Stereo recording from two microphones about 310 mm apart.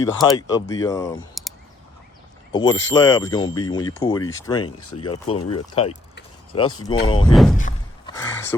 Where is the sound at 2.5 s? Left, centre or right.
Centre.